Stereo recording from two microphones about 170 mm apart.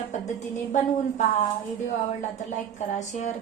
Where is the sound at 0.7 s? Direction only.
45° left (ahead or behind).